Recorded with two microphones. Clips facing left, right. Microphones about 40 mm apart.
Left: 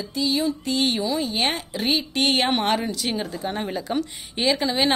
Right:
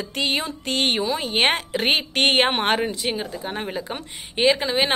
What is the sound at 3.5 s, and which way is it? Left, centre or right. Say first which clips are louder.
Speech: left 2 dB; centre.